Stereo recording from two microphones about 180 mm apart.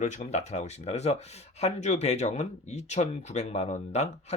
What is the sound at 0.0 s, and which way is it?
Speech, 40° left (ahead or behind).